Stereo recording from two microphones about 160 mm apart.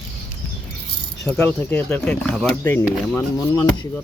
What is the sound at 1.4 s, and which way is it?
Speech, 10° left (ahead or behind).